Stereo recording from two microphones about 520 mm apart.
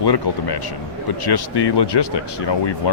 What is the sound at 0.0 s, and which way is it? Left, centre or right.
Speech, left.